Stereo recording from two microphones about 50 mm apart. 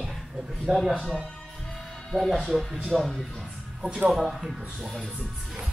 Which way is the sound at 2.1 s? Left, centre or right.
Centre.